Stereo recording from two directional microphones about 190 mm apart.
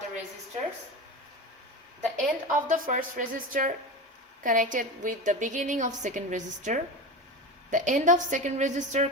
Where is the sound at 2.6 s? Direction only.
40° right (ahead or behind).